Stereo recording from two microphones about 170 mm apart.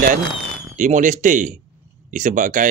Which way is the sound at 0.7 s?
50° right (ahead or behind).